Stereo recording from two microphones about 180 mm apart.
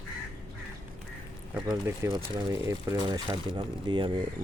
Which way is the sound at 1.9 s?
15° right (ahead or behind).